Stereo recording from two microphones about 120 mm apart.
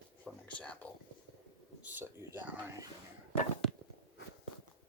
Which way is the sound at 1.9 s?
15° right (ahead or behind).